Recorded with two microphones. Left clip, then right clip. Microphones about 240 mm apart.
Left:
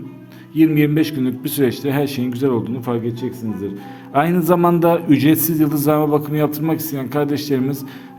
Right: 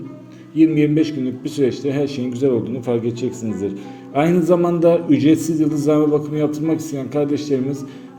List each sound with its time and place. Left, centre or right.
0.5 s a man's voice: left
4.4 s a man's voice: left